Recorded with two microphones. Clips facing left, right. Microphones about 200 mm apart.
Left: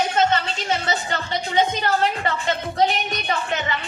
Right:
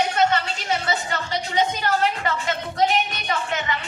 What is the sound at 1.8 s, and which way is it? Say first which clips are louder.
A woman's voice: left 1 dB; 30° left (ahead or behind).